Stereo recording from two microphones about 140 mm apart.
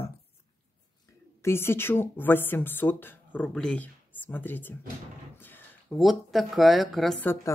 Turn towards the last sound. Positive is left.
turn(degrees=15)  # may be behind; listen again after turning